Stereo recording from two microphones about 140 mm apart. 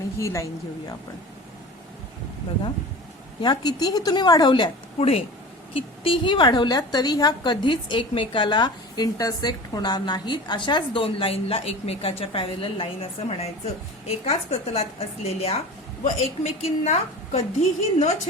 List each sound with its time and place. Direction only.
0.2 s a woman's voice: 20° left (ahead or behind)
3.4 s a woman's voice: 30° left (ahead or behind)
4.9 s a woman's voice: 45° left (ahead or behind)